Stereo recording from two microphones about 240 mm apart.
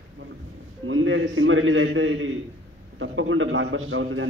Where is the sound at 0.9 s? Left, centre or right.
Right.